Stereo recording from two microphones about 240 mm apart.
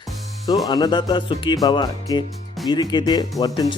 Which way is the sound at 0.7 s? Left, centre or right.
Centre.